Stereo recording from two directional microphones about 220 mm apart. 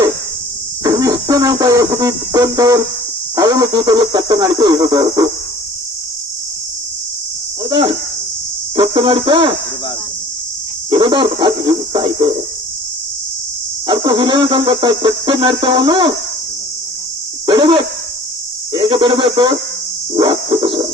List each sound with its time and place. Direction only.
0.9 s a sound: 15° right (ahead or behind)
2.6 s music: 15° right (ahead or behind)
3.3 s speech: 15° right (ahead or behind)
7.6 s cricket: 20° right (ahead or behind)
9.0 s speech: 20° right (ahead or behind)
10.9 s speech: 20° right (ahead or behind)
13.8 s speech: 20° right (ahead or behind)
17.4 s a sound: 20° right (ahead or behind)
18.7 s speech: 20° right (ahead or behind)
20.1 s music: 20° right (ahead or behind)